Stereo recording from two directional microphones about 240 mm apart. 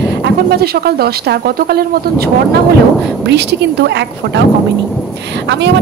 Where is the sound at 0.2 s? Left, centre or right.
Right.